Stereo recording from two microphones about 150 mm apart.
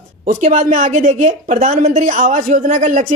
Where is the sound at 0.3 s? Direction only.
60° right (ahead or behind).